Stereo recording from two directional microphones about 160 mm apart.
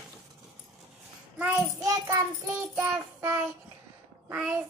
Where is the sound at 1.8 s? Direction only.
20° right (ahead or behind).